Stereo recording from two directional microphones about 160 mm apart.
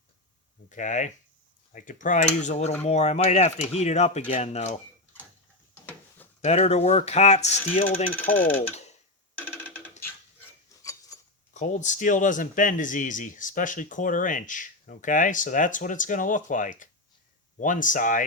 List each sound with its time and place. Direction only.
0.7 s speech: 50° left (ahead or behind)
5.7 s a sound: 10° left (ahead or behind)
6.4 s speech: 45° left (ahead or behind)
8.1 s speech: 10° left (ahead or behind)
8.7 s a sound: 45° left (ahead or behind)
9.4 s music: 15° left (ahead or behind)
11.1 s cutlery: 20° left (ahead or behind)
11.5 s speech: 50° left (ahead or behind)